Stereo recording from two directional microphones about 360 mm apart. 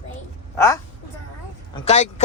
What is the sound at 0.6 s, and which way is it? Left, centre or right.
Speech, centre.